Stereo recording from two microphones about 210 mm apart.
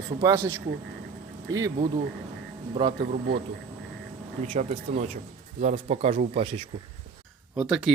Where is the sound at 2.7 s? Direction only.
20° right (ahead or behind).